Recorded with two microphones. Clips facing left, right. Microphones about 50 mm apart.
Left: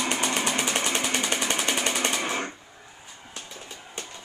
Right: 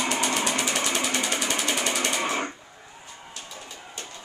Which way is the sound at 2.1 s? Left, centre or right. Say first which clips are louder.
Right 2 dB; centre.